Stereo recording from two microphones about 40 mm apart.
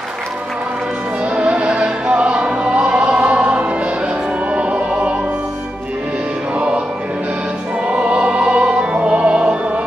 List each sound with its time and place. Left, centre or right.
1.3 s music: right
7.9 s music: right